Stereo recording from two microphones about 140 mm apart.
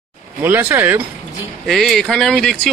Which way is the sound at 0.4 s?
15° right (ahead or behind).